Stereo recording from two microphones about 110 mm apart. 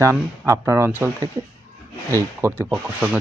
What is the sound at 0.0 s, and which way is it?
Speech, 25° right (ahead or behind).